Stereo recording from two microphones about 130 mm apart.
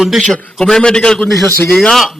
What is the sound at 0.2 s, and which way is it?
A man's voice, 5° left (ahead or behind).